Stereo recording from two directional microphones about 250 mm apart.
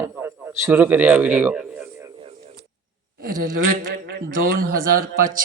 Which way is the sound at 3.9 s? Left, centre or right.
Right.